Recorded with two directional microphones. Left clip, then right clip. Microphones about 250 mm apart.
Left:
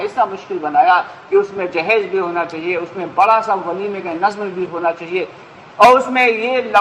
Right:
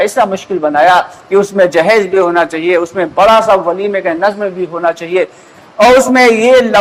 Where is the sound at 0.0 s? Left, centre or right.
Right.